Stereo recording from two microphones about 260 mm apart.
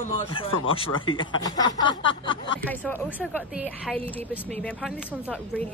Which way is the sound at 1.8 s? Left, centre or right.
Centre.